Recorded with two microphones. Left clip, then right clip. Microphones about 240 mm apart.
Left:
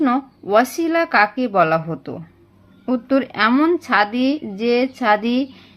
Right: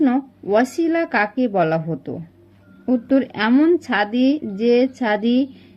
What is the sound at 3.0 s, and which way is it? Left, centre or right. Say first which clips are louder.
Speech: left 3 dB; centre.